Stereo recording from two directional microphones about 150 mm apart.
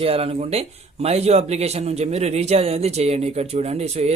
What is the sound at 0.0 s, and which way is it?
Speech, 40° right (ahead or behind).